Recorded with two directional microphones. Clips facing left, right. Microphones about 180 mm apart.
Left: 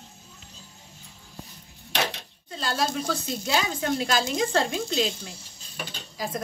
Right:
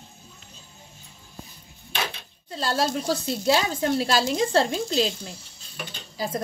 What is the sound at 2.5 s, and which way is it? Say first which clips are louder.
A woman's voice: right 3 dB; 35° right (ahead or behind).